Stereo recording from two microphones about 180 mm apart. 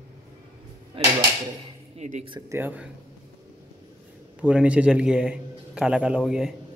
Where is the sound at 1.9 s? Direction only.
40° right (ahead or behind).